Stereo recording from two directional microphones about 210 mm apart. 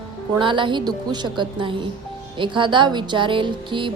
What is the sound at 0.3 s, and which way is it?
A woman's voice, 25° right (ahead or behind).